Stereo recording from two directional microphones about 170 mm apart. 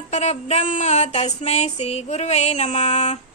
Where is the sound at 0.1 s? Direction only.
40° left (ahead or behind).